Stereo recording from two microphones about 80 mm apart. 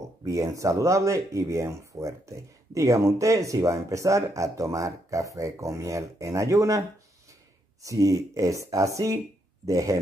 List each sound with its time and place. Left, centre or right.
0.2 s speech: right
7.8 s speech: right